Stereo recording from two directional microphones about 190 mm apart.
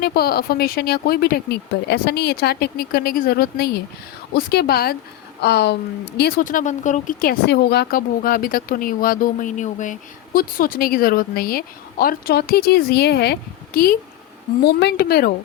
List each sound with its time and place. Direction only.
0.0 s a woman's voice: 55° left (ahead or behind)
14.6 s a woman's voice: 60° left (ahead or behind)